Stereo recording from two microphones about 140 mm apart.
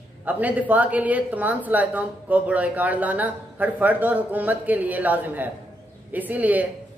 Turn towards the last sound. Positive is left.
turn(degrees=-10)  # may be behind; listen again after turning